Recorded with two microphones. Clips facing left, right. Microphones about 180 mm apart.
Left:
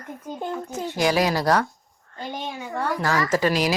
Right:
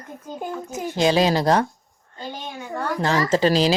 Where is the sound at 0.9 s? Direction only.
25° right (ahead or behind).